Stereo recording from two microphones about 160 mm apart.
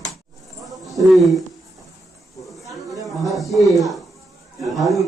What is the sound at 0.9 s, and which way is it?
Speech, centre (ahead or behind).